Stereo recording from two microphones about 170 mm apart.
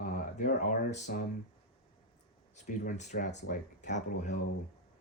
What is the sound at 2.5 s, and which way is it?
Speech, 45° left (ahead or behind).